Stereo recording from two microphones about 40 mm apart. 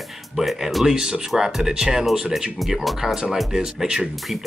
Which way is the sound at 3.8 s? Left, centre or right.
Centre.